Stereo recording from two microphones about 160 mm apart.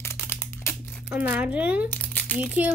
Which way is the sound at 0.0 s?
15° left (ahead or behind).